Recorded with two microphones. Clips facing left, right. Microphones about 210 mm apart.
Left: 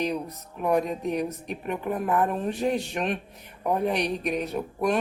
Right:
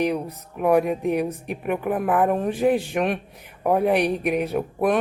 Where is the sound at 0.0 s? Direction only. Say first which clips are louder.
Right 5 dB; 60° right (ahead or behind).